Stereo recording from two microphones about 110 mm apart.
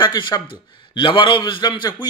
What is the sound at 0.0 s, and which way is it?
A man's voice, 40° left (ahead or behind).